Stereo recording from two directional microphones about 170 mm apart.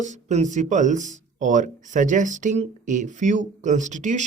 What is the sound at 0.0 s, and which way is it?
Speech, 45° right (ahead or behind).